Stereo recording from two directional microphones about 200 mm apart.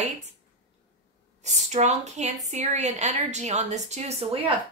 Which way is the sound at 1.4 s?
35° right (ahead or behind).